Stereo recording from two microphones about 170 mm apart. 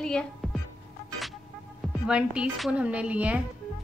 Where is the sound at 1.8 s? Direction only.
5° right (ahead or behind).